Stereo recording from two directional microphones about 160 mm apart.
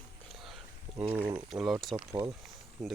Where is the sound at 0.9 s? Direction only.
15° right (ahead or behind).